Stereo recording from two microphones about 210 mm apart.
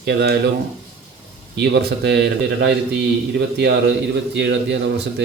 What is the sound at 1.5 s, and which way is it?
A man's voice, 50° right (ahead or behind).